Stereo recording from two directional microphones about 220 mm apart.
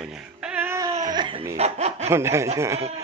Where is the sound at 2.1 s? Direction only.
10° right (ahead or behind).